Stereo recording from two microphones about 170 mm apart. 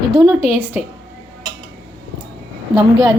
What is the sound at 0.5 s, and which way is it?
Speech, 10° right (ahead or behind).